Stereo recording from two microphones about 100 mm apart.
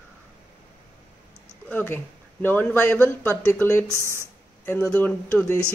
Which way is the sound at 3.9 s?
25° right (ahead or behind).